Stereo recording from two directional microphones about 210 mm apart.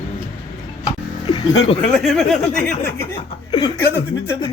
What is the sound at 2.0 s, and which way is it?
Speech, centre (ahead or behind).